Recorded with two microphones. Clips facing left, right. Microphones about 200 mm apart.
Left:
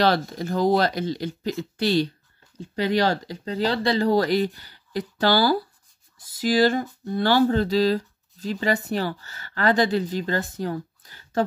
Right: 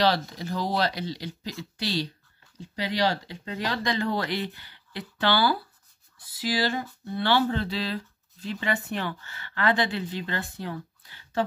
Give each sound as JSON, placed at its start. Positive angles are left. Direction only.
{"t": 0.0, "sound": "speech", "side_deg": 50}
{"t": 3.4, "sound": "speech", "side_deg": 30}